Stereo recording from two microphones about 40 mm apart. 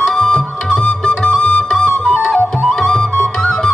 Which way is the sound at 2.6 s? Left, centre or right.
Centre.